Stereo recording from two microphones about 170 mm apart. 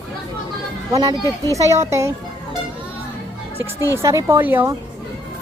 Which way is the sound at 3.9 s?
15° right (ahead or behind).